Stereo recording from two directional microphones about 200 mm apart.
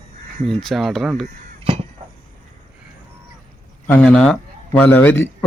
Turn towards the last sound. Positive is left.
turn(degrees=10)  # may be behind; listen again after turning